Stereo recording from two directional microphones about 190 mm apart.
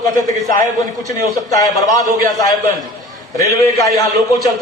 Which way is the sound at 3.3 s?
15° left (ahead or behind).